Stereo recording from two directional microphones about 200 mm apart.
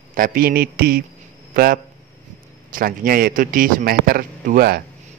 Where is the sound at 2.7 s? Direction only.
45° right (ahead or behind).